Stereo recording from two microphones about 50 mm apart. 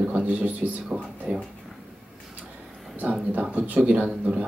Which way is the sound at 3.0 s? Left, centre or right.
Right.